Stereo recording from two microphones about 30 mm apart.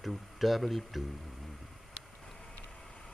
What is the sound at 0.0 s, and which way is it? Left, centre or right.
Speech, centre.